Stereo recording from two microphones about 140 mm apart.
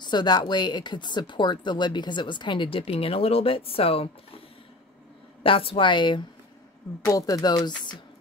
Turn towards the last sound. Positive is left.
turn(degrees=30)  # may be behind; listen again after turning